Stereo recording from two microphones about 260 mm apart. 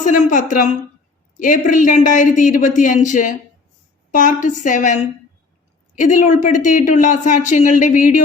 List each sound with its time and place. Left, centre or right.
0.0 s a woman's voice: left